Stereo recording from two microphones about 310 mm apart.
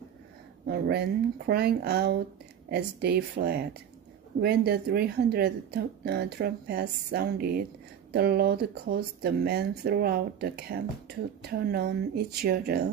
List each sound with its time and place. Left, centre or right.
0.7 s speech: right